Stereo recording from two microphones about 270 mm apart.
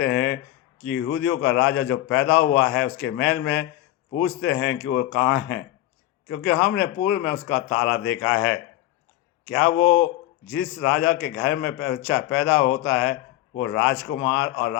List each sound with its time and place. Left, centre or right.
0.0 s a man's voice: left